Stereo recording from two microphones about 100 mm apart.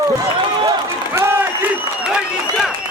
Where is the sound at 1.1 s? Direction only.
25° right (ahead or behind).